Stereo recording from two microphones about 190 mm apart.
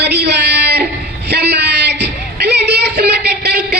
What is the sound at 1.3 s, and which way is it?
Music, 60° right (ahead or behind).